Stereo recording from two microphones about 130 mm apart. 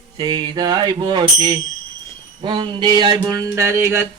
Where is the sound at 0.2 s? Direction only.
35° right (ahead or behind).